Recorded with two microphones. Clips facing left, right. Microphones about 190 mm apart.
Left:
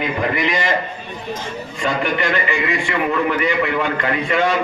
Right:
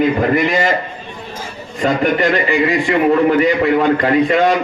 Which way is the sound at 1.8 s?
40° right (ahead or behind).